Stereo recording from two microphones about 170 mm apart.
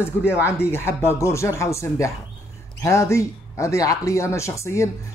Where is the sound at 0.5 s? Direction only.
15° left (ahead or behind).